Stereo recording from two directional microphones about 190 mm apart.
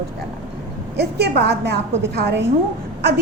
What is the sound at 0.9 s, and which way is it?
A woman's voice, 60° right (ahead or behind).